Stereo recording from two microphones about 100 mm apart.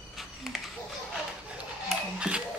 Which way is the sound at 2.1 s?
10° right (ahead or behind).